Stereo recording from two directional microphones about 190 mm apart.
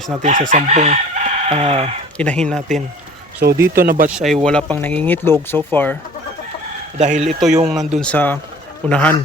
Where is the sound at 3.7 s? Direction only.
50° right (ahead or behind).